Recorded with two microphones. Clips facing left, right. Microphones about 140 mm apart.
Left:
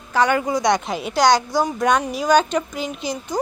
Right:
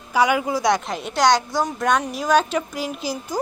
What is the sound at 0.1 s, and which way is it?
Speech, 10° right (ahead or behind).